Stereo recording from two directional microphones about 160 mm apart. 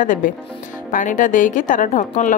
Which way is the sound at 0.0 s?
55° left (ahead or behind).